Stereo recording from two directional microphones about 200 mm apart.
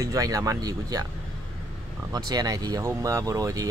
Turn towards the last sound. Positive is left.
turn(degrees=-15)  # may be behind; listen again after turning